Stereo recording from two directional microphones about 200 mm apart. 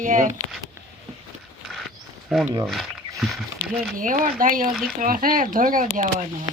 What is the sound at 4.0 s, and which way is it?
Speech, 40° right (ahead or behind).